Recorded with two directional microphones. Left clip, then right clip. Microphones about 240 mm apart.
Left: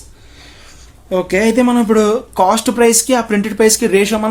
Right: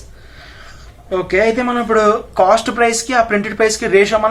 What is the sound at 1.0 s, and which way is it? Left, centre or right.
Speech, left.